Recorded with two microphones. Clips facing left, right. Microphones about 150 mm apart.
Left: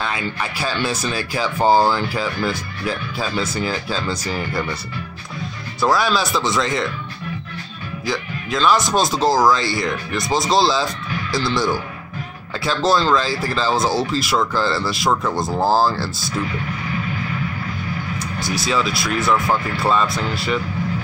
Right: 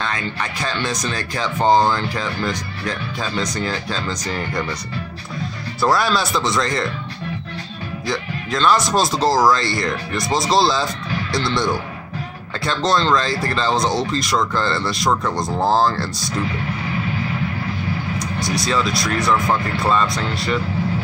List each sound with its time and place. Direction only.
0.0 s speech: 10° left (ahead or behind)
5.8 s speech: centre (ahead or behind)
8.1 s speech: centre (ahead or behind)
18.4 s speech: centre (ahead or behind)